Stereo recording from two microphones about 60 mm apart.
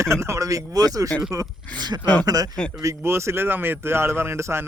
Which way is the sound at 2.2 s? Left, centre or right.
Right.